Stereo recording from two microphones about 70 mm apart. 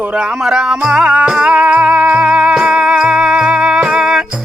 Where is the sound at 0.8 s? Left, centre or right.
Centre.